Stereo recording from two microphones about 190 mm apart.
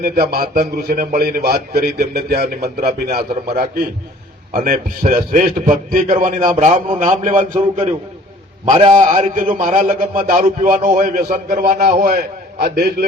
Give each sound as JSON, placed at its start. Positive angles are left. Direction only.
{"t": 0.0, "sound": "a man's voice", "side_deg": -50}